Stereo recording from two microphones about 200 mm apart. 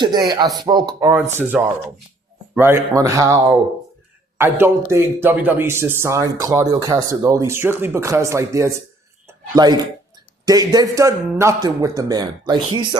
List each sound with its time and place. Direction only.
0.0 s a man's voice: 20° right (ahead or behind)
9.2 s a sound: 20° right (ahead or behind)
10.4 s a man's voice: 20° right (ahead or behind)